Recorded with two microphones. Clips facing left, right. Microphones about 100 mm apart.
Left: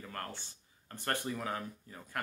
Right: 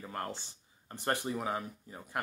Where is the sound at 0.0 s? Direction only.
20° right (ahead or behind).